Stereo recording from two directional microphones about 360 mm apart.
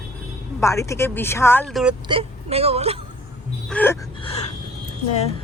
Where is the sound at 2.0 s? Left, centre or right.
Centre.